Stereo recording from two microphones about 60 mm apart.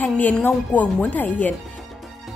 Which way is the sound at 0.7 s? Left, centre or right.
Left.